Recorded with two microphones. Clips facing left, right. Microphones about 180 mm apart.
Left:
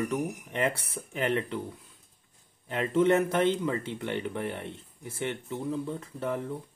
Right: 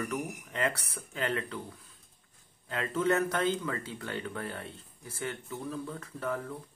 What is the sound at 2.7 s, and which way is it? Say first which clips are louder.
Speech: left 5 dB; 20° left (ahead or behind).